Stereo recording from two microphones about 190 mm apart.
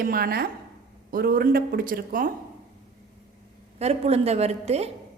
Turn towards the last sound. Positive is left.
turn(degrees=-35)  # may be behind; listen again after turning